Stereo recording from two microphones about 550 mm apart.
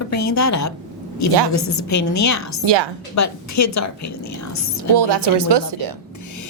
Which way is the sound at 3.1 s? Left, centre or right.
Left.